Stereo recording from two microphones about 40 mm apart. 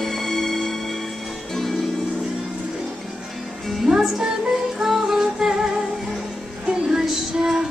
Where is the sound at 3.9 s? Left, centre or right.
Centre.